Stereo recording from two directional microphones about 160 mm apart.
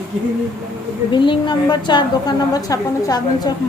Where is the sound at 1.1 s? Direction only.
30° left (ahead or behind).